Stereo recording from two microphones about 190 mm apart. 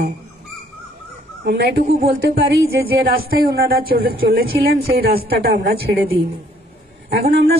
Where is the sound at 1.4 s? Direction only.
60° right (ahead or behind).